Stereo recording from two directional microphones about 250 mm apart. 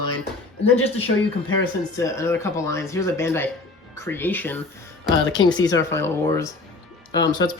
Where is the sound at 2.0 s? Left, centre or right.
Centre.